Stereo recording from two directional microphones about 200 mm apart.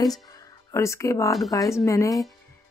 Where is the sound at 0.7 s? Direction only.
15° left (ahead or behind).